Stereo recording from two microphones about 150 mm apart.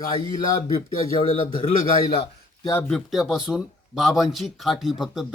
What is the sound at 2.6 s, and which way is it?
Speech, 15° left (ahead or behind).